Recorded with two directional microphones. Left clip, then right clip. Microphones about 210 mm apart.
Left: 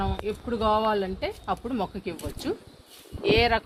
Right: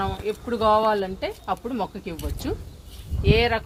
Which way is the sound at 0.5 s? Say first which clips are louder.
Right 4 dB; 20° left (ahead or behind).